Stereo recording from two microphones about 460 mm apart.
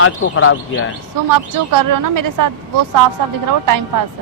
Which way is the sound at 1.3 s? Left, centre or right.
Right.